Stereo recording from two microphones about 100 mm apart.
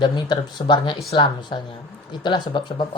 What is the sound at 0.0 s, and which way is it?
Speech, 50° left (ahead or behind).